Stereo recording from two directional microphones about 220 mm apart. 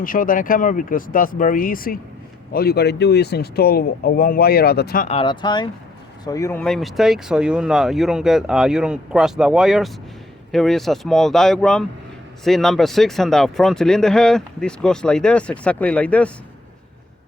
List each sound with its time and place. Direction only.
0.0 s speech: 40° left (ahead or behind)
5.0 s speech: 25° left (ahead or behind); by 16.3 s 5° left (ahead or behind)